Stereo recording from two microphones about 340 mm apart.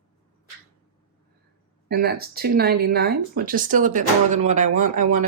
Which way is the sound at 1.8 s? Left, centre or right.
Right.